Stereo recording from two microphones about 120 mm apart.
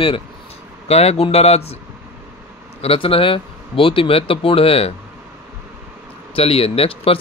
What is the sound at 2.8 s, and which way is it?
Speech, 50° left (ahead or behind).